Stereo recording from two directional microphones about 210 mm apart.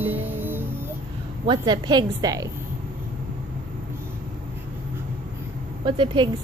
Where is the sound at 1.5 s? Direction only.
20° right (ahead or behind).